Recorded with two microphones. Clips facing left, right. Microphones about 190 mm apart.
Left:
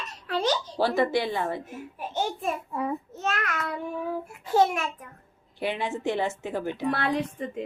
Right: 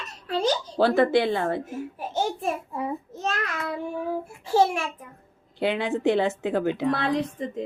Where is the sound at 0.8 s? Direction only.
55° right (ahead or behind).